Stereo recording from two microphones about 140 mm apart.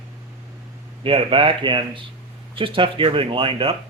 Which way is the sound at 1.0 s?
40° right (ahead or behind).